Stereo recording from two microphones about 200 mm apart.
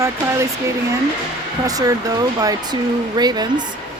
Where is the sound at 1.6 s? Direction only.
15° right (ahead or behind).